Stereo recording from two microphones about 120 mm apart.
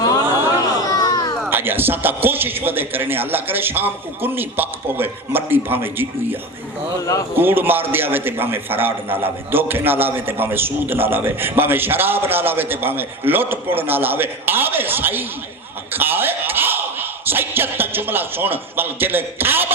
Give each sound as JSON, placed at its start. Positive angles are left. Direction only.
{"t": 0.8, "sound": "a sound", "side_deg": 30}
{"t": 1.5, "sound": "a man's voice", "side_deg": -20}
{"t": 7.0, "sound": "speech", "side_deg": 30}
{"t": 7.3, "sound": "a man's voice", "side_deg": -15}